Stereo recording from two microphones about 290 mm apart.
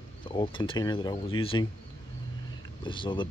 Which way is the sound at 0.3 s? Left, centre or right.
Centre.